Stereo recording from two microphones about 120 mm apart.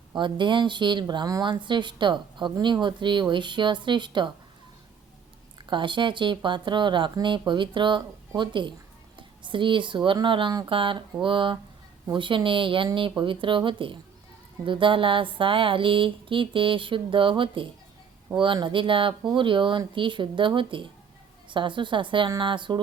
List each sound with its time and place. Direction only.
0.1 s speech: 40° right (ahead or behind)
5.7 s music: 40° right (ahead or behind)
8.4 s speech: 40° right (ahead or behind)
9.1 s music: 45° right (ahead or behind)
22.3 s speech: 40° right (ahead or behind)